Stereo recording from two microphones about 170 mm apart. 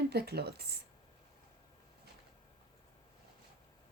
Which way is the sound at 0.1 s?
70° right (ahead or behind).